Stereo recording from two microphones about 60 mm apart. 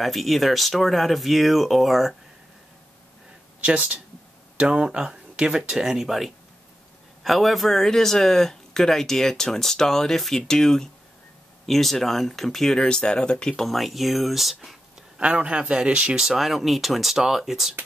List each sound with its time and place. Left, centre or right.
0.0 s speech: centre
3.6 s a man's voice: centre
13.7 s speech: centre
15.1 s a man's voice: right; by 17.7 s centre